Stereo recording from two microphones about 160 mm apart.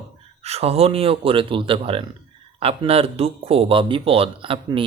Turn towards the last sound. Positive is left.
turn(degrees=-35)  # may be behind; listen again after turning